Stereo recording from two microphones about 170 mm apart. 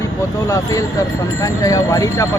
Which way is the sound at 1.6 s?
20° left (ahead or behind).